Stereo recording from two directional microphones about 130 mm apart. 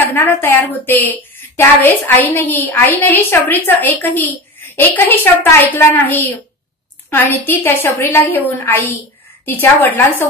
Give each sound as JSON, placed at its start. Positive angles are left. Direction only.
{"t": 0.1, "sound": "a woman's voice", "side_deg": 15}